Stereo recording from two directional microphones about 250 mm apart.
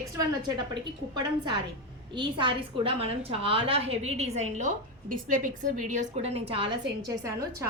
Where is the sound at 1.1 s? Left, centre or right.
Centre.